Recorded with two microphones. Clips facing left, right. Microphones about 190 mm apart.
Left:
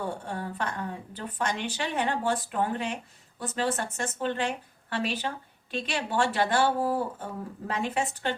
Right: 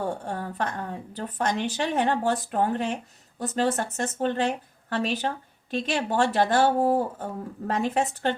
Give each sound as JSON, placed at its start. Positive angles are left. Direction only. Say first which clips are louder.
{"t": 0.0, "sound": "a woman's voice", "louder": "right 3 dB", "side_deg": -40}